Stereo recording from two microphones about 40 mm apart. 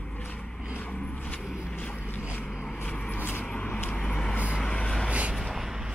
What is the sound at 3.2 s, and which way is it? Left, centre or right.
Vehicle, left.